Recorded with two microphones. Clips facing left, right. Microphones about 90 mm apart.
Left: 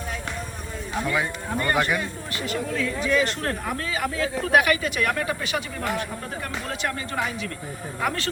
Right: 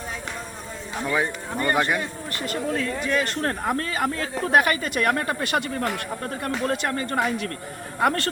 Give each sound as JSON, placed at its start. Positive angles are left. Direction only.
{"t": 1.1, "sound": "speech", "side_deg": -25}
{"t": 1.9, "sound": "speech", "side_deg": -45}